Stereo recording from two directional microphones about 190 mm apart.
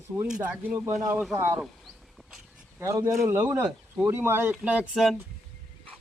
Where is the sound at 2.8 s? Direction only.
15° right (ahead or behind).